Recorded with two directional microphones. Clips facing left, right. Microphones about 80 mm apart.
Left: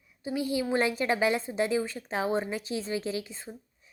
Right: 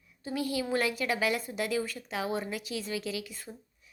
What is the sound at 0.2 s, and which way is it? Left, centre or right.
A woman's voice, centre.